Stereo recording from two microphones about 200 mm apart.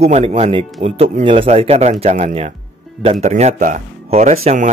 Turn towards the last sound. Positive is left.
turn(degrees=-30)  # may be behind; listen again after turning